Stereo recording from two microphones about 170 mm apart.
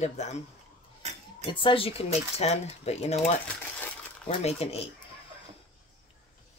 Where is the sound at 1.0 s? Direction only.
40° right (ahead or behind).